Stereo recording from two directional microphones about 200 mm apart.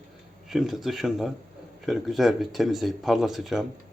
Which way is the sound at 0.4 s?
Centre (ahead or behind).